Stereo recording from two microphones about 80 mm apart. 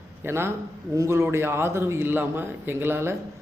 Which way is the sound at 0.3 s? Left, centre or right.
Right.